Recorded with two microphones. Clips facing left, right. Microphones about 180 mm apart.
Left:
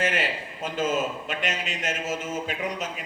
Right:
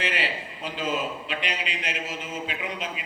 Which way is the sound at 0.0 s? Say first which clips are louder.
Left 3 dB; 45° left (ahead or behind).